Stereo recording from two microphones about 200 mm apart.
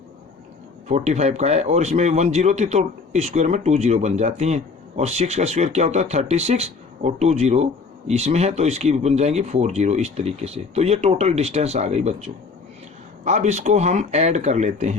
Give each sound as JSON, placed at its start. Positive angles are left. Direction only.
{"t": 0.9, "sound": "speech", "side_deg": -35}